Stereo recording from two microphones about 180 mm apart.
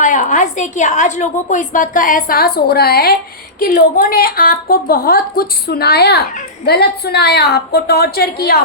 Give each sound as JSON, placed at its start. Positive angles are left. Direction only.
{"t": 0.0, "sound": "a woman's voice", "side_deg": 45}